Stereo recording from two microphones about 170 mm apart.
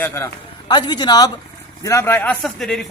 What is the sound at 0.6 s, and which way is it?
A woman's voice, 25° left (ahead or behind).